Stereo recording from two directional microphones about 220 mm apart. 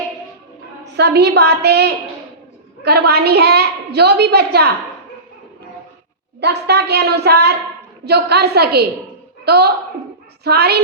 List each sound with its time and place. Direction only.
0.9 s a woman's voice: 50° right (ahead or behind)
3.1 s a woman's voice: 45° right (ahead or behind)
6.4 s a woman's voice: 50° right (ahead or behind)